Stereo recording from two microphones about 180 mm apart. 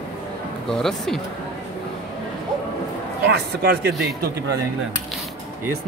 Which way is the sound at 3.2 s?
65° right (ahead or behind).